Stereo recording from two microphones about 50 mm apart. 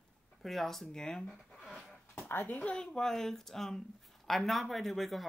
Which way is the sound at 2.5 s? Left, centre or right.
Left.